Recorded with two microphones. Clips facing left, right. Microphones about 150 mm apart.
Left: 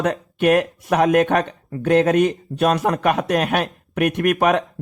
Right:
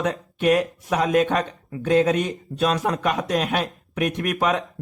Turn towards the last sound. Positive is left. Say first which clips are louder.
# left 5 dB
turn(degrees=60)  # may be behind; listen again after turning